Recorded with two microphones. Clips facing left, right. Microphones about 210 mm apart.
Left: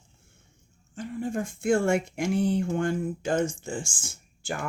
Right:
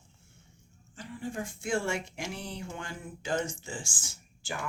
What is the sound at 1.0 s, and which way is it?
Speech, 50° left (ahead or behind).